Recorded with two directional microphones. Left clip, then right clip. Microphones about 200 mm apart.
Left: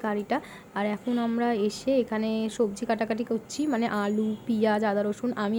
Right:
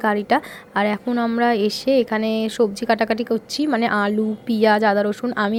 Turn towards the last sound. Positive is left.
turn(degrees=-15)  # may be behind; listen again after turning